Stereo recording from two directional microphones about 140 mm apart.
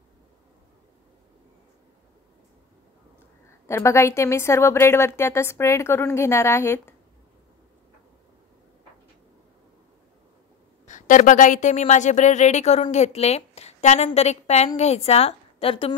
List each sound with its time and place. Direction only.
3.6 s a woman's voice: 20° left (ahead or behind)
10.9 s a woman's voice: 65° left (ahead or behind); by 15.9 s 45° left (ahead or behind)